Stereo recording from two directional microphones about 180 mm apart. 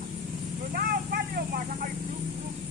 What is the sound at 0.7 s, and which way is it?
Vehicle, 55° right (ahead or behind).